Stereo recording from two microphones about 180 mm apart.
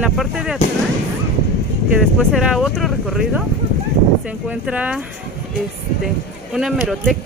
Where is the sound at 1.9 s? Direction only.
Centre (ahead or behind).